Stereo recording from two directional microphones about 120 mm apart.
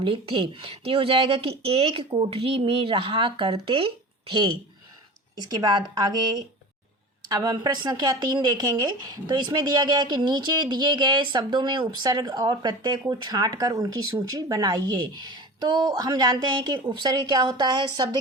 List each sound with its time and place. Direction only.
0.0 s speech: 50° right (ahead or behind)
5.5 s a woman's voice: 35° right (ahead or behind)